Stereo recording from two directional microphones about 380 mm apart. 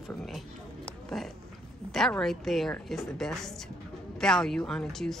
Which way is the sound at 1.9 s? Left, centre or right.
Centre.